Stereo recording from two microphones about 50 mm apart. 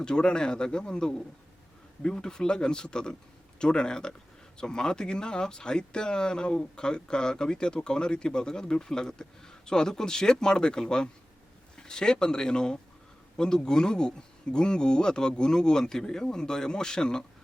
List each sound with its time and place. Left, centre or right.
0.0 s speech: centre